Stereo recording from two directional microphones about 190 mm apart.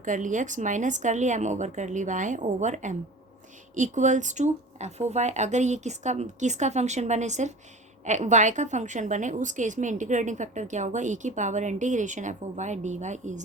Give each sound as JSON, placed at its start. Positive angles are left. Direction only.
{"t": 0.0, "sound": "a woman's voice", "side_deg": -40}